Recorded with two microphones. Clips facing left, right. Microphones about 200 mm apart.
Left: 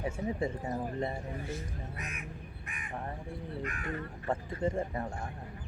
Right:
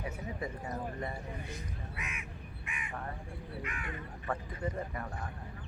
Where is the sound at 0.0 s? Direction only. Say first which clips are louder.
Left 6 dB; 25° left (ahead or behind).